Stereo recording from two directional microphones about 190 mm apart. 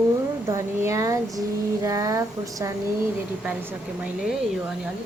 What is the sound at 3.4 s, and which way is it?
Speech, 5° right (ahead or behind).